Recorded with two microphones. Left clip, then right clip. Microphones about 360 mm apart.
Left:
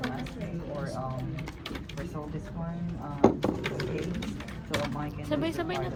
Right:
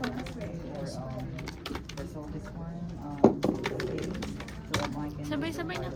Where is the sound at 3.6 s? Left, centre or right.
Right.